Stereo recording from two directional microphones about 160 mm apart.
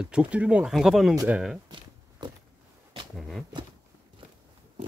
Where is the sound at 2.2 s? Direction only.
25° right (ahead or behind).